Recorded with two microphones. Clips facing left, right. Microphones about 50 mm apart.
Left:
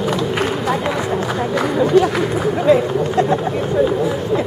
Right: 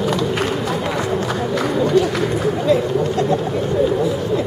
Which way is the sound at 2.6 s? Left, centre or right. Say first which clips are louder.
Left 4 dB; left.